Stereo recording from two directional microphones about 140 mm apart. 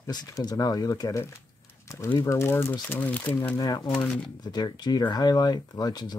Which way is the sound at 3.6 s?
30° left (ahead or behind).